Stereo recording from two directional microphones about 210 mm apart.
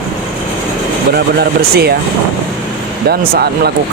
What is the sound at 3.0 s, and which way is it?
Speech, 50° right (ahead or behind).